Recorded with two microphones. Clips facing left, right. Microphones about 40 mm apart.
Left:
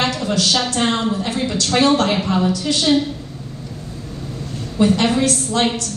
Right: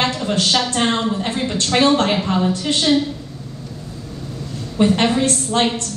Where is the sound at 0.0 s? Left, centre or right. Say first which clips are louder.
Even; right.